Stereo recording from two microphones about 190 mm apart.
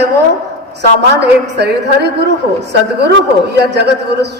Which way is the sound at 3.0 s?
60° right (ahead or behind).